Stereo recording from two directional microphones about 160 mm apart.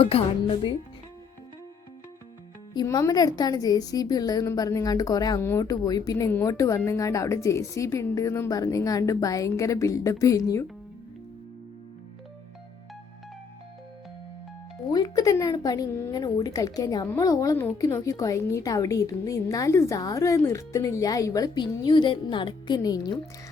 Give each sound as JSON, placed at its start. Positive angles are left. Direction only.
{"t": 0.0, "sound": "speech", "side_deg": 35}
{"t": 2.7, "sound": "a woman's voice", "side_deg": 20}
{"t": 14.9, "sound": "a woman's voice", "side_deg": 25}